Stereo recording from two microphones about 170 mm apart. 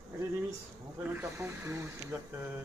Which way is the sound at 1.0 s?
15° right (ahead or behind).